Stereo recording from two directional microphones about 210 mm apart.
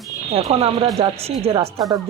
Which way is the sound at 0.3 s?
30° right (ahead or behind).